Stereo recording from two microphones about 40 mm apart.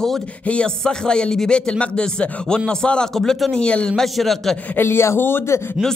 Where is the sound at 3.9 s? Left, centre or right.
Centre.